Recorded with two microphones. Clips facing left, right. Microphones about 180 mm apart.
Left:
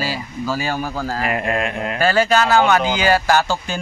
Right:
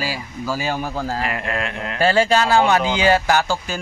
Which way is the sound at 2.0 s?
25° right (ahead or behind).